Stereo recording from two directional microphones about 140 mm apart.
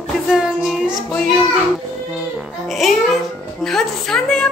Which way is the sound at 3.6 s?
5° left (ahead or behind).